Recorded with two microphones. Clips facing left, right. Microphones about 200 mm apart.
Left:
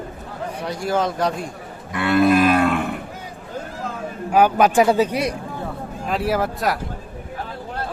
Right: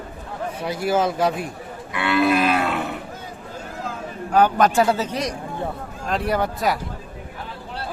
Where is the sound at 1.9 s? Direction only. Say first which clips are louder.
Left 3 dB; 50° left (ahead or behind).